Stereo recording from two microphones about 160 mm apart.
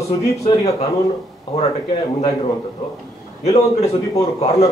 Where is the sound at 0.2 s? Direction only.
40° left (ahead or behind).